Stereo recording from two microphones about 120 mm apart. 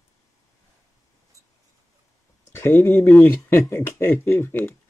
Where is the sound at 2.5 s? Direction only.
20° left (ahead or behind).